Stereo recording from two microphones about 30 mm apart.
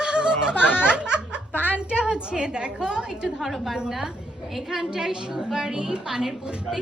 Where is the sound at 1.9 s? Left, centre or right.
Right.